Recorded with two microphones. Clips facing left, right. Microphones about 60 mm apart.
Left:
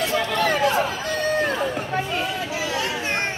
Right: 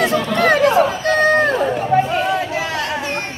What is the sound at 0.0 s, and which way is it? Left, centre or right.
Chatter, right.